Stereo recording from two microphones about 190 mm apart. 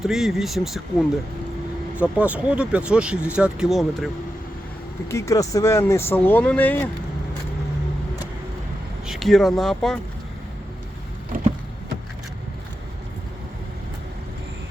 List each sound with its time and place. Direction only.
0.0 s speech: centre (ahead or behind)
2.0 s speech: 5° right (ahead or behind)
5.0 s speech: 15° left (ahead or behind)
9.0 s speech: centre (ahead or behind)